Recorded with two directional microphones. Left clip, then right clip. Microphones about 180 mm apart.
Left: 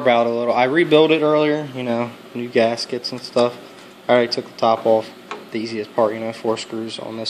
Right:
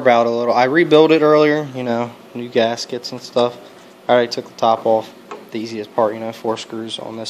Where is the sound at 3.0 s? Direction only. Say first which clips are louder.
Left 1 dB; 25° right (ahead or behind).